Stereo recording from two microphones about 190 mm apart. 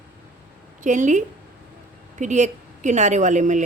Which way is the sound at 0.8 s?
40° right (ahead or behind).